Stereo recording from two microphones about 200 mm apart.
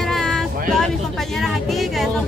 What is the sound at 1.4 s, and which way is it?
Music, centre (ahead or behind).